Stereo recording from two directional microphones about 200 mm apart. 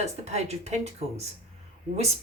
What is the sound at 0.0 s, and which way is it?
Speech, 35° right (ahead or behind).